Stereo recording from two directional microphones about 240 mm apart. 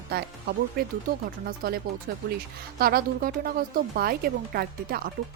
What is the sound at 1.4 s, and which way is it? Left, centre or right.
Speech, right.